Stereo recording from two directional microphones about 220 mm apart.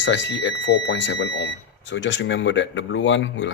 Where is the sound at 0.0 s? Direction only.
55° left (ahead or behind).